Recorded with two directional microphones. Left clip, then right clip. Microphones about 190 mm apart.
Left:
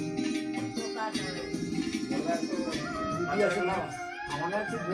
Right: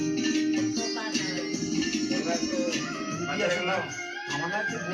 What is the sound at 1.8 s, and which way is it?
Music, 20° right (ahead or behind).